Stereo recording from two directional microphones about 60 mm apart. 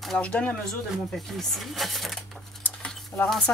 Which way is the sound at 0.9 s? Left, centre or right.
Centre.